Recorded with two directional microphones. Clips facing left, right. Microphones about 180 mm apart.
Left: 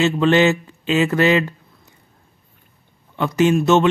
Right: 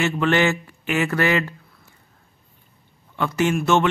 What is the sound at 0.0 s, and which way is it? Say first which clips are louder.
Speech: left 5 dB; 20° left (ahead or behind).